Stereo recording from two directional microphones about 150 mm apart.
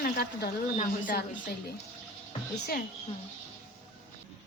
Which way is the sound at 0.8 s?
60° left (ahead or behind).